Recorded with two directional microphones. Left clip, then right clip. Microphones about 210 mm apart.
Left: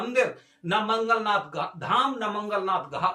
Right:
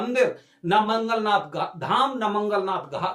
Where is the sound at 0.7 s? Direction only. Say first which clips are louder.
Right 2 dB; 20° right (ahead or behind).